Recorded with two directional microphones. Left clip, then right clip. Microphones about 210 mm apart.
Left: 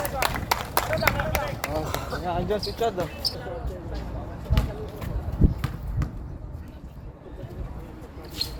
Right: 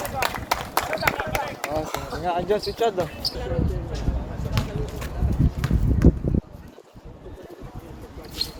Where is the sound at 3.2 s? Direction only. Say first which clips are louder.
Right 1 dB; 20° left (ahead or behind).